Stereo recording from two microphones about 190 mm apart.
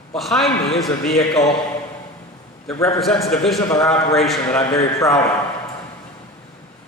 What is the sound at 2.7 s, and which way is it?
Speech, 15° left (ahead or behind).